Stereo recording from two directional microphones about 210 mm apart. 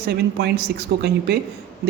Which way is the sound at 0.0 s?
50° right (ahead or behind).